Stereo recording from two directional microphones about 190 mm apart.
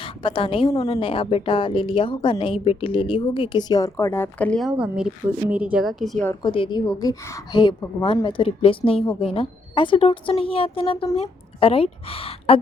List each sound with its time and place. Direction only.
0.0 s a woman's voice: 25° left (ahead or behind); by 4.7 s 5° left (ahead or behind)
4.8 s speech: 5° right (ahead or behind)
6.4 s a woman's voice: 25° left (ahead or behind)